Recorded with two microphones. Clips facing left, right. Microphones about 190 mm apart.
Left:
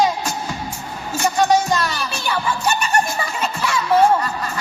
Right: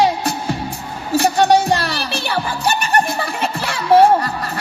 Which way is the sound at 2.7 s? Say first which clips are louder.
Right 4 dB; 60° right (ahead or behind).